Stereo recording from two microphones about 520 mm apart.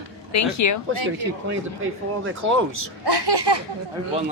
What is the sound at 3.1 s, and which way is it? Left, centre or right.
Speech, right.